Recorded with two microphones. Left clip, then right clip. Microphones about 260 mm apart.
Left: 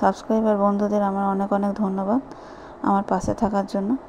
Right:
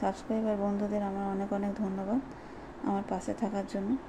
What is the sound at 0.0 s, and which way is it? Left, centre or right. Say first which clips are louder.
Speech: left 12 dB; left.